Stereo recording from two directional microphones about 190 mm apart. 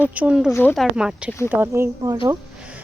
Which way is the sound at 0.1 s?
5° right (ahead or behind).